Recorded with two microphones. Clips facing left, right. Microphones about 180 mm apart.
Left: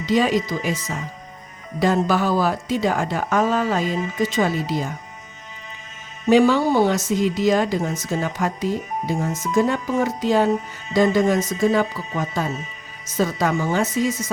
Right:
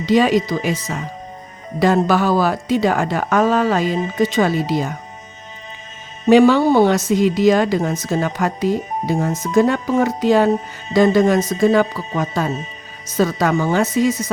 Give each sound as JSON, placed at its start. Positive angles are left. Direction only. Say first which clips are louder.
{"t": 0.0, "sound": "speech", "louder": "right 4 dB", "side_deg": -75}
{"t": 1.8, "sound": "speech", "louder": "right 4 dB", "side_deg": -75}
{"t": 6.2, "sound": "speech", "louder": "right 4 dB", "side_deg": -65}